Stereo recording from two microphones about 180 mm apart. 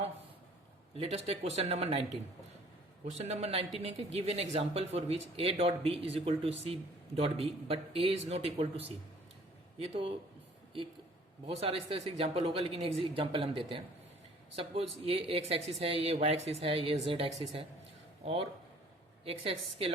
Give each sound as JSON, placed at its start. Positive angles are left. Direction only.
{"t": 0.9, "sound": "speech", "side_deg": -35}
{"t": 3.2, "sound": "speech", "side_deg": -35}
{"t": 11.6, "sound": "speech", "side_deg": -35}
{"t": 19.2, "sound": "speech", "side_deg": -30}